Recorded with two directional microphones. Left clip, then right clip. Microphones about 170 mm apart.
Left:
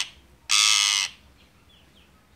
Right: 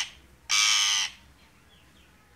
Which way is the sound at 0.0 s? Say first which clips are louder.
Left 2 dB; 25° left (ahead or behind).